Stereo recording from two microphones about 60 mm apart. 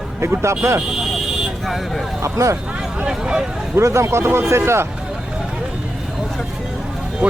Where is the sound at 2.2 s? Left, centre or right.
Right.